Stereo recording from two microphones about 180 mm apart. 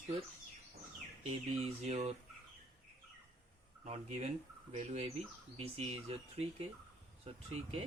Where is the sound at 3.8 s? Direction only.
35° right (ahead or behind).